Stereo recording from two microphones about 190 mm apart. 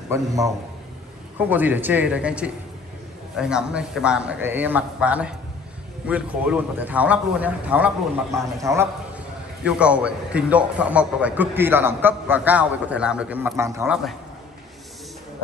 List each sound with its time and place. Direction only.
0.1 s a man's voice: 15° right (ahead or behind)
9.7 s a man's voice: 5° right (ahead or behind)
13.8 s a man's voice: centre (ahead or behind)